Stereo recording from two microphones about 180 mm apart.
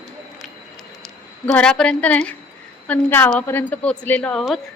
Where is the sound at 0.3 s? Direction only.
Centre (ahead or behind).